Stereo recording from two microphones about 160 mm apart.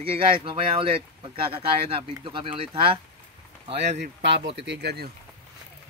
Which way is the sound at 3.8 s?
90° right.